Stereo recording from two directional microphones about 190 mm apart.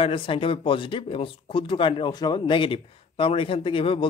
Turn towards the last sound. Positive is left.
turn(degrees=30)  # may be behind; listen again after turning